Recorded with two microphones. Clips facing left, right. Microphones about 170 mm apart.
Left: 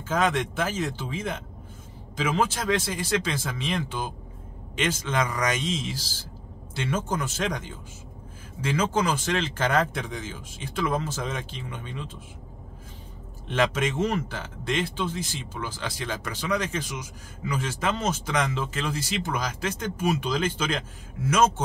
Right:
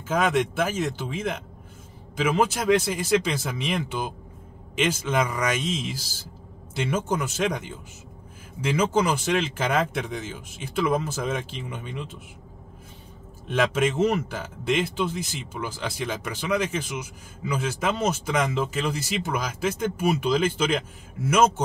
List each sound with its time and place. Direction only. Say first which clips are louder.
0.1 s speech: right 2 dB; 10° right (ahead or behind)
8.7 s speech: right 2 dB; 10° right (ahead or behind)
13.5 s speech: right 2 dB; 5° right (ahead or behind)